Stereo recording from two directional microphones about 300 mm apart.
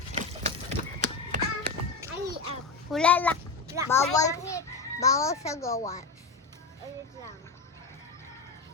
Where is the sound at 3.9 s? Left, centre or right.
Centre.